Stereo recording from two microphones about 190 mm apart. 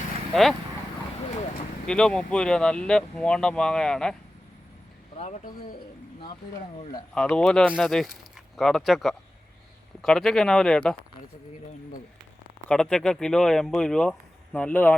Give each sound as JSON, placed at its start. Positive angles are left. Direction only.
{"t": 0.3, "sound": "speech", "side_deg": 0}
{"t": 1.9, "sound": "speech", "side_deg": 5}
{"t": 5.1, "sound": "speech", "side_deg": 35}
{"t": 7.1, "sound": "speech", "side_deg": 5}
{"t": 12.6, "sound": "speech", "side_deg": 5}